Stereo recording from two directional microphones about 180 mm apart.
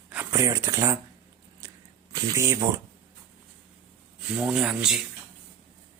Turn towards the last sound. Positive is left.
turn(degrees=-5)  # may be behind; listen again after turning